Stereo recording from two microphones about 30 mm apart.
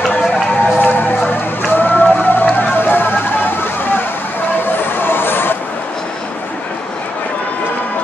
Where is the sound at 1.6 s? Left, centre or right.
Left.